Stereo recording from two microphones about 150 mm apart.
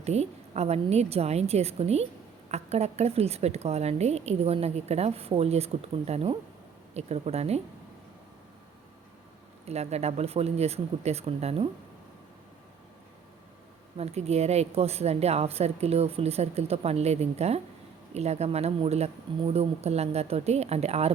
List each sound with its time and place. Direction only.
0.0 s a woman's voice: 45° right (ahead or behind)
9.6 s a woman's voice: 45° right (ahead or behind)
13.9 s a woman's voice: 45° right (ahead or behind)